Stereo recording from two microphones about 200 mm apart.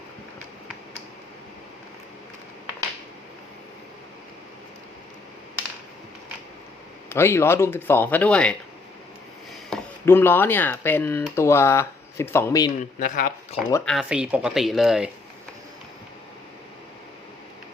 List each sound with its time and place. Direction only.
7.1 s speech: 10° left (ahead or behind)
9.6 s speech: 10° left (ahead or behind)
12.8 s speech: 40° left (ahead or behind)
13.8 s speech: centre (ahead or behind)